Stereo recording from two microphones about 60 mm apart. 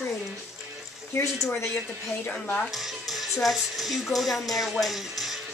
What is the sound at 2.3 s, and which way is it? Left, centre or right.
Speech, centre.